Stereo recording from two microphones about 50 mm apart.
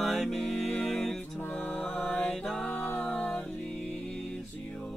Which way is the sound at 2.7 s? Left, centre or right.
Left.